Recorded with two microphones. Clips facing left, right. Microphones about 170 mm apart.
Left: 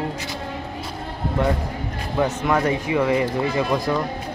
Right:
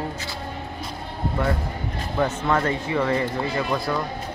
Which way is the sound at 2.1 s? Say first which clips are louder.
Left 2 dB; 10° left (ahead or behind).